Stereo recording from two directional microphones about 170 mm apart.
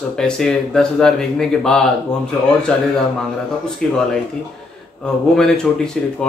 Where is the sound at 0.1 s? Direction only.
5° left (ahead or behind).